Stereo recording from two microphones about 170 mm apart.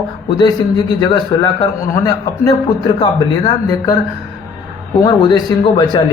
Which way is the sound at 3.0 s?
25° left (ahead or behind).